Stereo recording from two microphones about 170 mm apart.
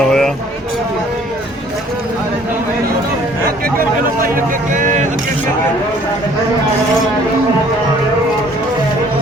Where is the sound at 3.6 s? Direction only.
55° right (ahead or behind).